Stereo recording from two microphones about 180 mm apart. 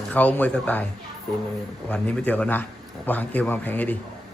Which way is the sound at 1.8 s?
10° left (ahead or behind).